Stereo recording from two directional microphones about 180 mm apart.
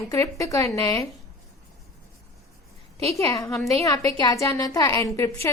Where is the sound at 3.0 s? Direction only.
20° left (ahead or behind).